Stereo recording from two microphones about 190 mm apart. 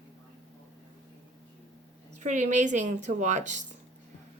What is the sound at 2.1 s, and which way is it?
A woman's voice, 40° right (ahead or behind).